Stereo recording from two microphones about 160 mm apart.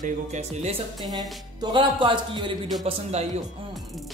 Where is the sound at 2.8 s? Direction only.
40° right (ahead or behind).